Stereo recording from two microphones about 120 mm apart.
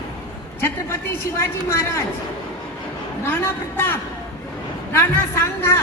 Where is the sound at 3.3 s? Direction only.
15° left (ahead or behind).